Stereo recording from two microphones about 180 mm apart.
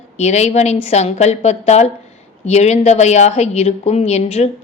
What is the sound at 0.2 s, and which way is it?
A woman's voice, 40° left (ahead or behind).